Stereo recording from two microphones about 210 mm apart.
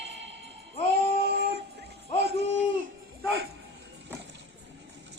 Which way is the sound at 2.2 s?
55° right (ahead or behind).